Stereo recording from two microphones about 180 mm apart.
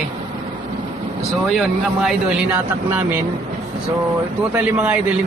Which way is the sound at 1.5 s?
5° right (ahead or behind).